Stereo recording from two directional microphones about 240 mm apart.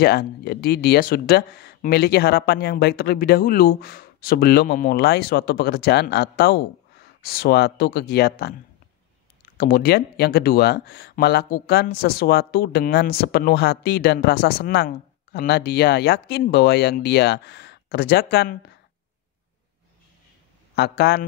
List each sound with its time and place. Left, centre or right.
0.0 s speech: left
9.6 s speech: left
20.7 s speech: left